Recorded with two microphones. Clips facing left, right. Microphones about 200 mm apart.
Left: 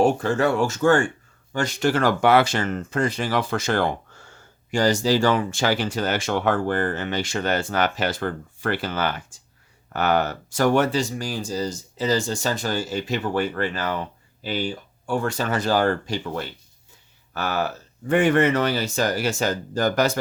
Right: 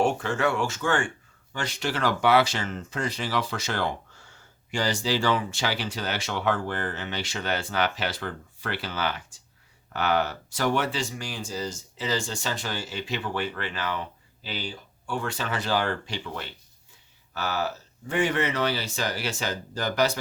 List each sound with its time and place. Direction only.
0.0 s speech: 40° left (ahead or behind)
17.3 s speech: 55° left (ahead or behind)